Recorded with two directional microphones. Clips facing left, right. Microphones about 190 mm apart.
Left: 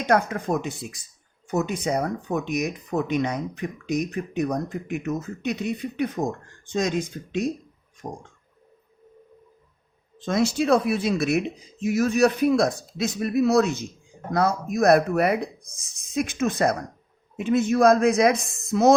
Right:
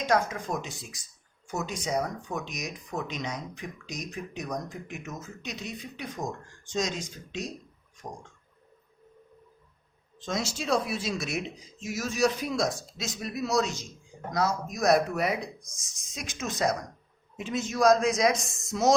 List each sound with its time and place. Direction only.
0.0 s speech: 60° left (ahead or behind)
8.0 s a sound: 35° left (ahead or behind)
10.2 s speech: 55° left (ahead or behind)